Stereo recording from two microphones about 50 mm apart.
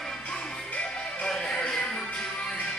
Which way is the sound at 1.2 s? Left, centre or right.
Centre.